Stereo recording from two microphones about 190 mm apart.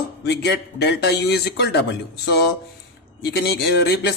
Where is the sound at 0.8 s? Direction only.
60° left (ahead or behind).